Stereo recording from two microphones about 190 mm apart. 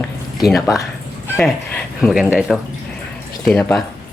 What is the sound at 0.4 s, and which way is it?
Speech, centre (ahead or behind).